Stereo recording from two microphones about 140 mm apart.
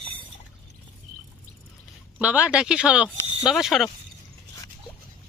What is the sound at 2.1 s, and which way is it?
Speech, 10° right (ahead or behind).